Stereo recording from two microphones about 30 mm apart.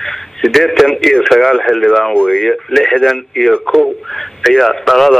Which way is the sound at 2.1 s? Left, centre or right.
Left.